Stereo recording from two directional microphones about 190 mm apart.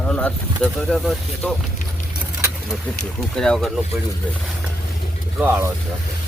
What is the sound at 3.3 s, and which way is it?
Speech, 5° left (ahead or behind).